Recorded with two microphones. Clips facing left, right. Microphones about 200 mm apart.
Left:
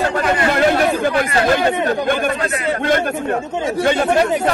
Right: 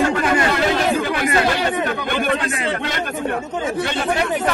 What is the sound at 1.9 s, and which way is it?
Speech, 45° left (ahead or behind).